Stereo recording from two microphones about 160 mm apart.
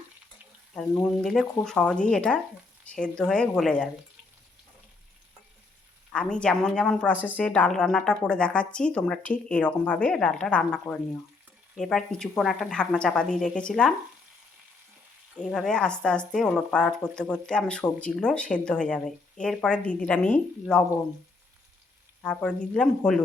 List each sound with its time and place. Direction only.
0.8 s speech: centre (ahead or behind)
6.1 s a woman's voice: 5° left (ahead or behind)
15.4 s speech: 5° left (ahead or behind)
22.2 s speech: 5° left (ahead or behind)